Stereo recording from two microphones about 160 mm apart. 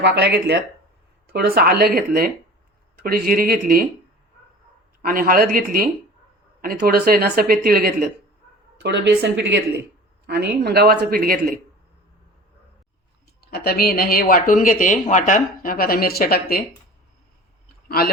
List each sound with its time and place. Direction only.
0.0 s a woman's voice: 90° right
1.3 s speech: 70° right (ahead or behind)
5.0 s speech: 65° right (ahead or behind)
8.8 s a woman's voice: 90° right; by 11.6 s 65° right (ahead or behind)
13.5 s speech: 70° left (ahead or behind)
17.8 s speech: 70° left (ahead or behind)